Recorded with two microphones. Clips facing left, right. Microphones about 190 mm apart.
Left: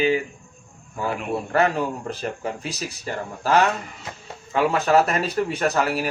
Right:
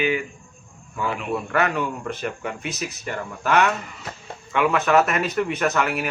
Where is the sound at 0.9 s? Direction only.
40° left (ahead or behind).